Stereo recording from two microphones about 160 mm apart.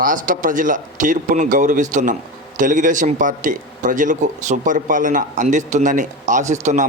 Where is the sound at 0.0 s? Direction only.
55° right (ahead or behind).